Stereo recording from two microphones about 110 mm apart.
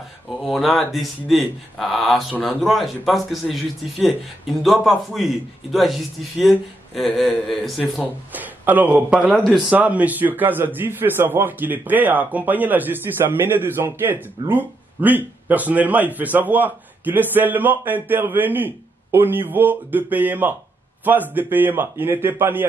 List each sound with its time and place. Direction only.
0.5 s a man's voice: centre (ahead or behind)
4.6 s a man's voice: centre (ahead or behind)
7.0 s a man's voice: centre (ahead or behind)
8.3 s speech: 15° right (ahead or behind)
9.4 s a man's voice: centre (ahead or behind)
9.8 s a man's voice: 15° right (ahead or behind)